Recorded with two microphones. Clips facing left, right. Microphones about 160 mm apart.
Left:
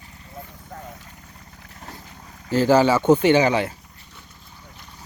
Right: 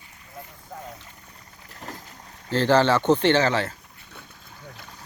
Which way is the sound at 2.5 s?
10° left (ahead or behind).